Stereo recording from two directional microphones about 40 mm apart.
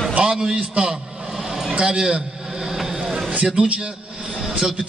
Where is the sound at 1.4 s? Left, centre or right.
Centre.